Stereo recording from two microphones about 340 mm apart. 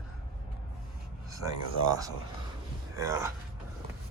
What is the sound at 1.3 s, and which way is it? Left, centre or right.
Speech, centre.